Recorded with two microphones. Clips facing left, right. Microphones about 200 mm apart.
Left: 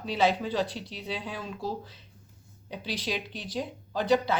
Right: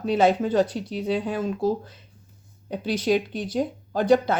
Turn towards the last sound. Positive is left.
turn(degrees=-50)  # may be behind; listen again after turning